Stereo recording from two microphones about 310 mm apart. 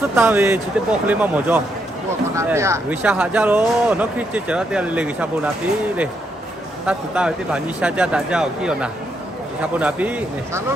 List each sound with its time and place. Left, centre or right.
0.2 s speech: centre
6.8 s speech: centre